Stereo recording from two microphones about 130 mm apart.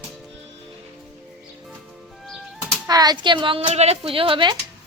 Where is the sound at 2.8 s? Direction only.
30° right (ahead or behind).